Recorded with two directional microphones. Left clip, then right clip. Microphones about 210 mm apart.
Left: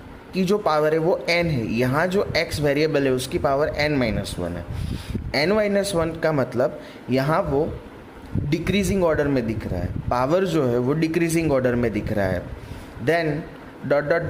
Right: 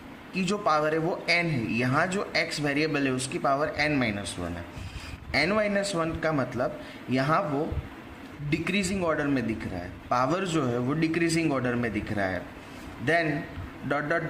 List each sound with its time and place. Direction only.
0.3 s speech: 40° left (ahead or behind)
5.3 s speech: 40° left (ahead or behind)
8.4 s speech: 45° left (ahead or behind)
13.8 s a man's voice: 40° left (ahead or behind)